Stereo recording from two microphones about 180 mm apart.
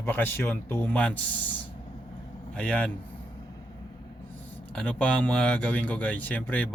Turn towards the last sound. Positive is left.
turn(degrees=10)  # may be behind; listen again after turning